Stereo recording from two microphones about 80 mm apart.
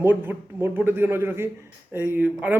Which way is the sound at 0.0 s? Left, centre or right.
Right.